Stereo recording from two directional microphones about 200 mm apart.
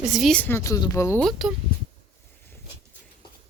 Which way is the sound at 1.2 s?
Centre (ahead or behind).